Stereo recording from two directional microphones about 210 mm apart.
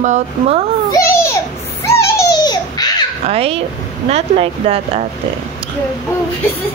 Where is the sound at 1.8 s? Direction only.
15° left (ahead or behind).